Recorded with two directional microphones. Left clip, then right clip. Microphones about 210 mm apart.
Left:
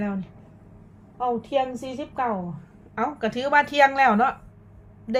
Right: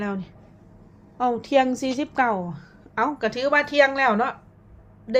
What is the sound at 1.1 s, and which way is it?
A woman's voice, 30° right (ahead or behind).